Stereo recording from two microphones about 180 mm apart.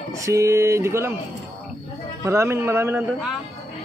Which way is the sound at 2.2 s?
15° right (ahead or behind).